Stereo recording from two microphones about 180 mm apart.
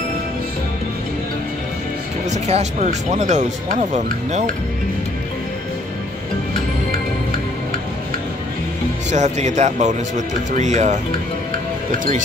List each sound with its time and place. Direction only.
2.2 s speech: 40° right (ahead or behind)
9.1 s speech: 40° right (ahead or behind)